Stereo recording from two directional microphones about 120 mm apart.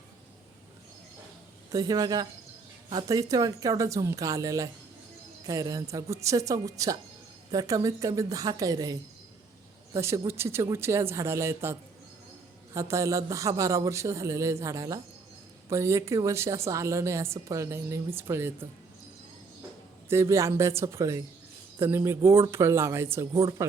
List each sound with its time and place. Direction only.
1.7 s a woman's voice: 35° right (ahead or behind)
20.1 s a woman's voice: 25° right (ahead or behind)